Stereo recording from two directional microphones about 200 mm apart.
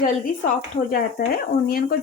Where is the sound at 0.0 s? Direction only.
45° left (ahead or behind).